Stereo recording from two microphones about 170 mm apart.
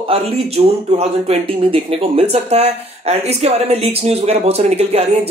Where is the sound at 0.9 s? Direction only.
35° right (ahead or behind).